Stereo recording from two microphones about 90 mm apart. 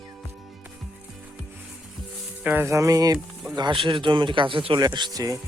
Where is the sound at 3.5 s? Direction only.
55° right (ahead or behind).